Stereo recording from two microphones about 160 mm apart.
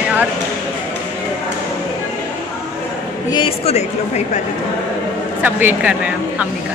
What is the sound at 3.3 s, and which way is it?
A woman's voice, 35° left (ahead or behind).